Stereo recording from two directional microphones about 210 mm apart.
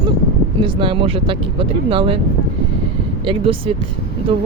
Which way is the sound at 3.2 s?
25° right (ahead or behind).